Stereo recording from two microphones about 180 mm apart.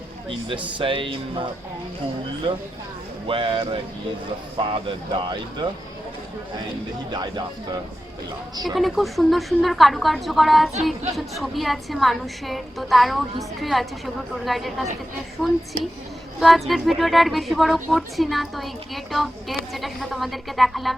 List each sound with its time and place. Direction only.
0.3 s speech: 30° right (ahead or behind)
2.5 s speech: 30° right (ahead or behind)
7.1 s speech: 20° right (ahead or behind)
8.7 s a woman's voice: centre (ahead or behind)